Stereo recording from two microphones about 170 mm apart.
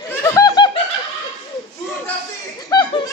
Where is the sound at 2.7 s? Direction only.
25° left (ahead or behind).